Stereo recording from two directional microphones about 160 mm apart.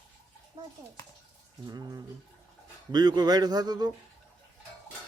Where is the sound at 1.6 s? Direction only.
25° right (ahead or behind).